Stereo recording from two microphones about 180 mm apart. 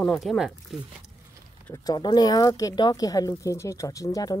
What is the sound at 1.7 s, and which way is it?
Speech, 20° left (ahead or behind).